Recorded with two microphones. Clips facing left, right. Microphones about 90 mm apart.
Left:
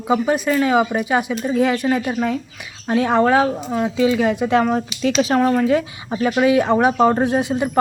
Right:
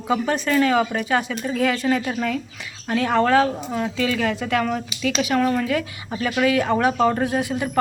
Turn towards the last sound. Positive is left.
turn(degrees=25)  # may be behind; listen again after turning